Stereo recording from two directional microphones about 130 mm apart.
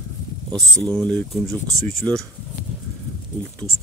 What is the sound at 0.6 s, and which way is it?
Speech, 5° left (ahead or behind).